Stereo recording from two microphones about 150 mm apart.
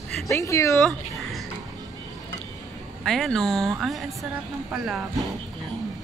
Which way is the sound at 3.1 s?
5° left (ahead or behind).